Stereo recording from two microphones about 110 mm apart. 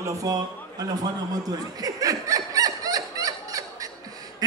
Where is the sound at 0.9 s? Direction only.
35° right (ahead or behind).